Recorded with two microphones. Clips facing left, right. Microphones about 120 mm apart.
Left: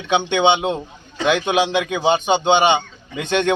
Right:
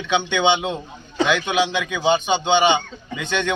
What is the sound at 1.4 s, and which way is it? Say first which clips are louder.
A man's voice: left 3 dB; 50° left (ahead or behind).